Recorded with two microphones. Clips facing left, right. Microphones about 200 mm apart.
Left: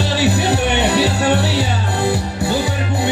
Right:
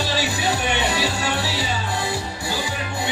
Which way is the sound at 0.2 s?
65° left (ahead or behind).